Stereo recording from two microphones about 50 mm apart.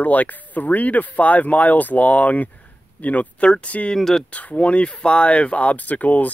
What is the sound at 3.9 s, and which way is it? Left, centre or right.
Speech, centre.